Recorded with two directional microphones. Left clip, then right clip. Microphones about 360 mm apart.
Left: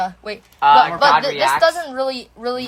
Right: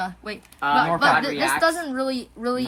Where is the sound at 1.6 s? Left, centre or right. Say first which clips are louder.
Left 5 dB; centre.